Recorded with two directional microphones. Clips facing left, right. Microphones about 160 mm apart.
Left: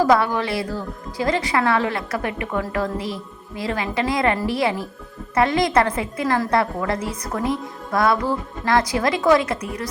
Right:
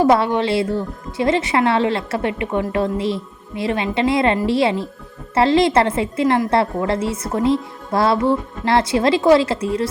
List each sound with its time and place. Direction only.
0.0 s speech: 25° right (ahead or behind)